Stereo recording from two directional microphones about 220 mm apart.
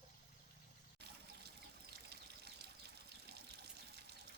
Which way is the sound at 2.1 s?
50° right (ahead or behind).